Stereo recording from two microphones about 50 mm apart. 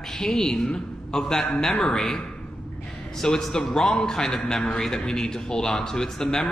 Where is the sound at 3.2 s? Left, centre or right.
Centre.